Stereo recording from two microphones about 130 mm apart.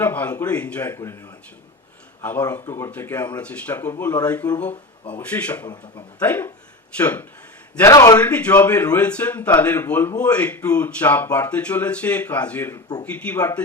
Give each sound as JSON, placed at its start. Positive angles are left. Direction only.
{"t": 0.0, "sound": "a man's voice", "side_deg": 10}
{"t": 0.9, "sound": "speech", "side_deg": 20}
{"t": 2.4, "sound": "a man's voice", "side_deg": 25}
{"t": 7.9, "sound": "speech", "side_deg": 25}
{"t": 8.2, "sound": "a man's voice", "side_deg": 10}
{"t": 12.7, "sound": "speech", "side_deg": 30}
{"t": 13.1, "sound": "a man's voice", "side_deg": 10}